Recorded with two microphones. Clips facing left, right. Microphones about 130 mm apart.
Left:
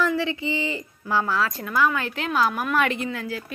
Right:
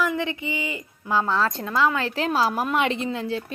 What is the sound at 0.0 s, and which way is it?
A woman's voice, 20° right (ahead or behind).